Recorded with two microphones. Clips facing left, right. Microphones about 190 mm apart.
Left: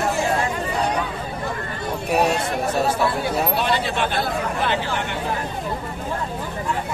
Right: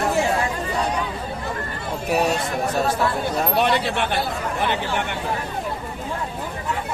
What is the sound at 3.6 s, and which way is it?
Speech, 60° right (ahead or behind).